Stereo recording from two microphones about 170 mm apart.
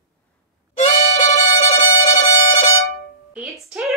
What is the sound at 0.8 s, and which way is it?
Music, 40° left (ahead or behind).